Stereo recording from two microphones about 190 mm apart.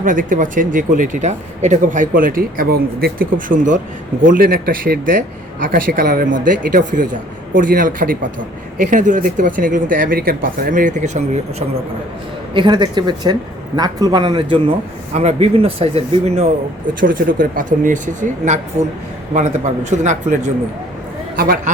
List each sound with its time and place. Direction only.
0.0 s speech: 45° right (ahead or behind)
12.5 s a man's voice: 25° right (ahead or behind)
15.1 s speech: 35° right (ahead or behind)
17.0 s speech: 45° right (ahead or behind)